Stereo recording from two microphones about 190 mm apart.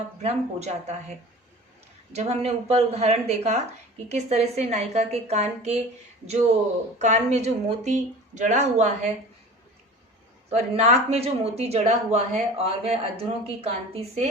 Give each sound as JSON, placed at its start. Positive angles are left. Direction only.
{"t": 0.2, "sound": "speech", "side_deg": -35}
{"t": 2.1, "sound": "speech", "side_deg": -35}
{"t": 7.0, "sound": "speech", "side_deg": -35}
{"t": 10.5, "sound": "speech", "side_deg": -35}